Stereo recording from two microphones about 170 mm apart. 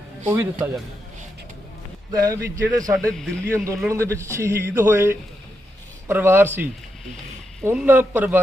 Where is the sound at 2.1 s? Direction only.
20° right (ahead or behind).